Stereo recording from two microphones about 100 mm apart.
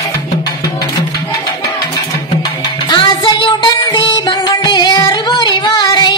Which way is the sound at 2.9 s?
50° left (ahead or behind).